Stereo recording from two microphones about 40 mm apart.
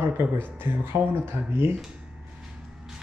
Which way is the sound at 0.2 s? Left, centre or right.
Right.